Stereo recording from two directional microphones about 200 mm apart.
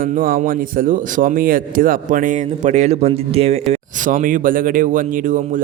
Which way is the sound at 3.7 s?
40° right (ahead or behind).